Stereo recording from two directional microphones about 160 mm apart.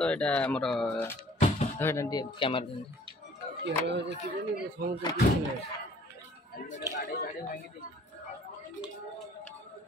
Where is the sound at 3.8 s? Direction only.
90° right.